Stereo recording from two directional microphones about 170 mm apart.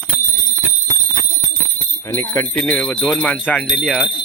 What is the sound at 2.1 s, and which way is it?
Speech, 15° left (ahead or behind).